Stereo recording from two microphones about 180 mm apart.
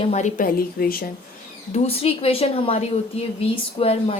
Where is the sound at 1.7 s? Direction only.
35° left (ahead or behind).